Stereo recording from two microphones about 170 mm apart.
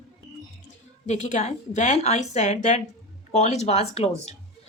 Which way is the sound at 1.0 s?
45° left (ahead or behind).